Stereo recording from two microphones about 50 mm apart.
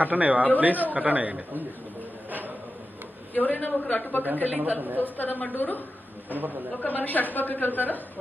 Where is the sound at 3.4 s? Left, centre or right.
Left.